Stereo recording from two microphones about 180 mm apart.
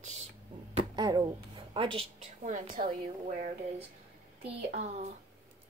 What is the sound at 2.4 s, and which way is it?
A woman's voice, 45° right (ahead or behind).